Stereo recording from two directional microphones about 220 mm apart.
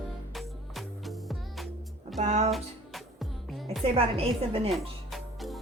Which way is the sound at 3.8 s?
25° right (ahead or behind).